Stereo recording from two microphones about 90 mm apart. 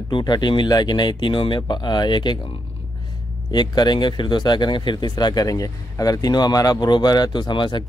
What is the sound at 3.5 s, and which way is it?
Speech, 55° left (ahead or behind).